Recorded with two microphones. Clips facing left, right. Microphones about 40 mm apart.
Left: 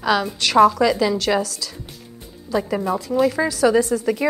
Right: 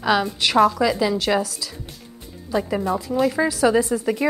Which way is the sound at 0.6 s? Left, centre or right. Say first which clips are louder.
Left 3 dB; centre.